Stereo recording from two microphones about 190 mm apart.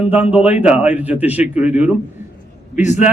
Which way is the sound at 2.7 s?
40° left (ahead or behind).